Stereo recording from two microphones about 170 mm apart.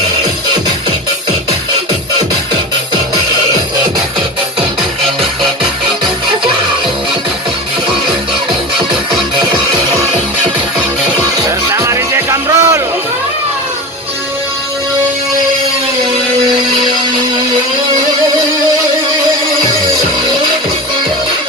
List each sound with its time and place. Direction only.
11.4 s music: 15° right (ahead or behind)